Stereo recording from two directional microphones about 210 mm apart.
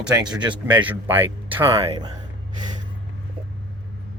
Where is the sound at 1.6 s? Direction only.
25° right (ahead or behind).